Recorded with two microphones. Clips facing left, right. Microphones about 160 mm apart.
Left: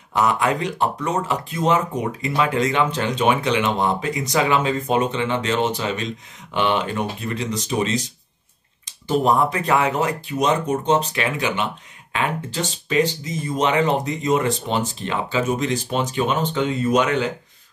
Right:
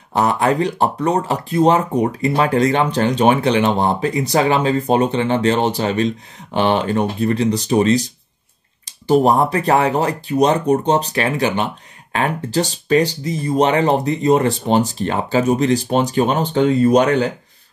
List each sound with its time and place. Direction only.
0.1 s speech: 35° right (ahead or behind)